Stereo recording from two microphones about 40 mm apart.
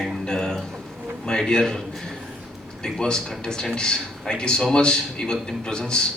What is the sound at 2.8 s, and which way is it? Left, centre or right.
A man's voice, centre.